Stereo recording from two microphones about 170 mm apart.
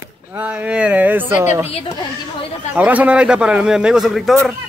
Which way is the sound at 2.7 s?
10° right (ahead or behind).